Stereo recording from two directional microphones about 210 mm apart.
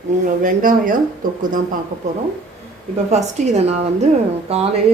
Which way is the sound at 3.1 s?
30° right (ahead or behind).